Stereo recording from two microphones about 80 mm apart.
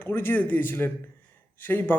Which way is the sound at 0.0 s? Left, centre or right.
Left.